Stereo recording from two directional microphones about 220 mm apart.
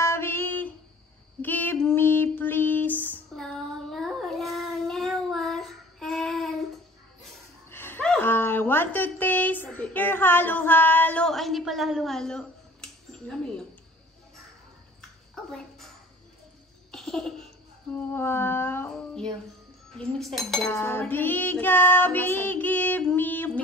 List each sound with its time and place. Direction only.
0.0 s female singing: 10° left (ahead or behind)
1.4 s a sound: 10° left (ahead or behind)
7.7 s a sound: 10° left (ahead or behind)
15.0 s bathtub: 5° left (ahead or behind)
16.9 s laughter: centre (ahead or behind)
17.9 s female singing: 10° left (ahead or behind)
20.0 s dishes: centre (ahead or behind)
20.6 s music: 10° left (ahead or behind)